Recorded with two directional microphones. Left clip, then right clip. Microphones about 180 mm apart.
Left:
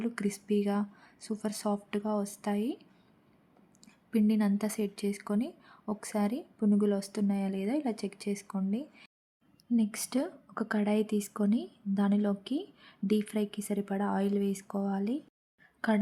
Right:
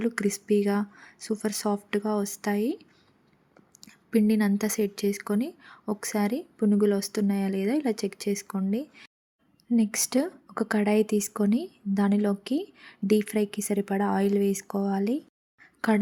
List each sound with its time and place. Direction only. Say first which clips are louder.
0.0 s a woman's voice: right 7 dB; 15° right (ahead or behind)
3.8 s a woman's voice: right 6 dB; 15° right (ahead or behind)